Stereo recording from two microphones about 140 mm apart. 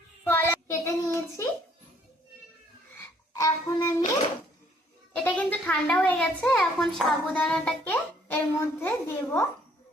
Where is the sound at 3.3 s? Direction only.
25° left (ahead or behind).